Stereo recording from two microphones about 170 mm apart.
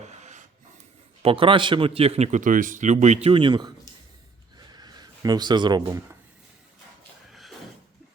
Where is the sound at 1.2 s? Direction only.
30° right (ahead or behind).